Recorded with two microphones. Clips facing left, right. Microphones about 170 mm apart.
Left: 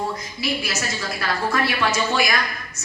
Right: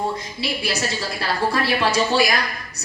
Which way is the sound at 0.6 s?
30° right (ahead or behind).